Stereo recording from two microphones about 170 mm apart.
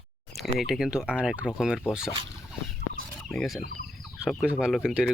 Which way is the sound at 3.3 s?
5° left (ahead or behind).